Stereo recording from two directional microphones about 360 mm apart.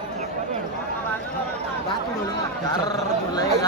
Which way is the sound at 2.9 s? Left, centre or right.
Centre.